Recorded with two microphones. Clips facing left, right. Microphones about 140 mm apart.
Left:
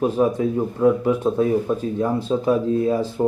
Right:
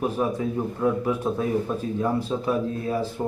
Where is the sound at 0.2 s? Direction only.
25° left (ahead or behind).